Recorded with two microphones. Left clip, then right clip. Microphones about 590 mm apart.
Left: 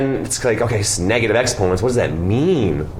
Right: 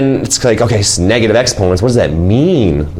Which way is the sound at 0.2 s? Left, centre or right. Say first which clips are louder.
Right 7 dB; right.